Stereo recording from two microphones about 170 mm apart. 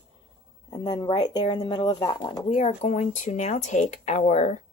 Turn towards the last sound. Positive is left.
turn(degrees=45)  # may be behind; listen again after turning